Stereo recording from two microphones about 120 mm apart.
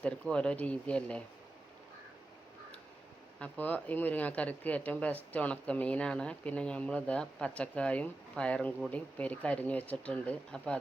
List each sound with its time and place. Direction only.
0.0 s speech: 10° left (ahead or behind)
3.4 s speech: 15° left (ahead or behind)